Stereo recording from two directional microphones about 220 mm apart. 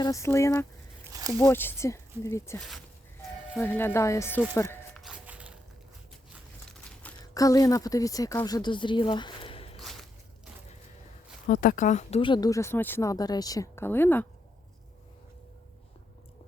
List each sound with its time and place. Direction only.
0.0 s speech: 15° left (ahead or behind)
1.0 s a sound: 15° right (ahead or behind)
1.4 s speech: 10° left (ahead or behind)
4.9 s walk: 5° right (ahead or behind)
6.7 s crushing: 5° left (ahead or behind)
7.3 s speech: 15° left (ahead or behind)
9.7 s a sound: centre (ahead or behind)
11.4 s speech: 40° left (ahead or behind); by 14.3 s 10° left (ahead or behind)